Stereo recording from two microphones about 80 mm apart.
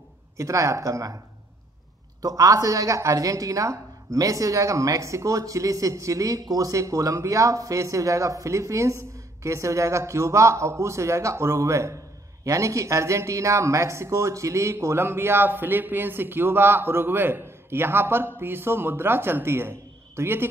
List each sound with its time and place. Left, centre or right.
0.4 s speech: right
2.2 s a woman's voice: right